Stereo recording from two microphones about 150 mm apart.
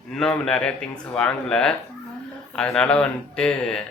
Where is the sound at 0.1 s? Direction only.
5° left (ahead or behind).